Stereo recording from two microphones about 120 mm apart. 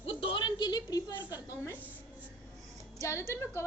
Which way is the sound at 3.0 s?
25° left (ahead or behind).